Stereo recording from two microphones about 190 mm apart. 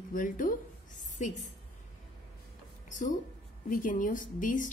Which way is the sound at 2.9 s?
40° left (ahead or behind).